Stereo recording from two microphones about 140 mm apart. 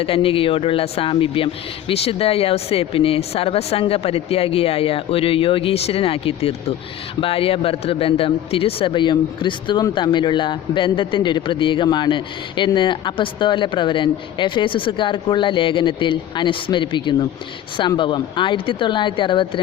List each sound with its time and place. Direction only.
0.0 s a man's voice: 40° left (ahead or behind)